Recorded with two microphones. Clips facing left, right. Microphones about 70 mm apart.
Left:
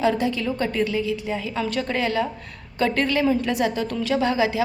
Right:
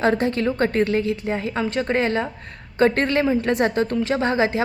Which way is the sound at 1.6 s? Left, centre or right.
Right.